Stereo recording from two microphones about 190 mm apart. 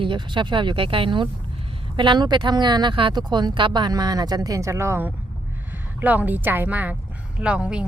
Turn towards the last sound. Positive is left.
turn(degrees=-5)  # may be behind; listen again after turning